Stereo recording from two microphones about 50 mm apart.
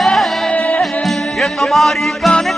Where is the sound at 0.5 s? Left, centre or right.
Left.